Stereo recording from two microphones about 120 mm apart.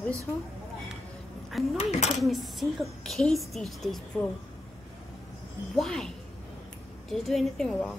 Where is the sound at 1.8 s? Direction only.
70° left (ahead or behind).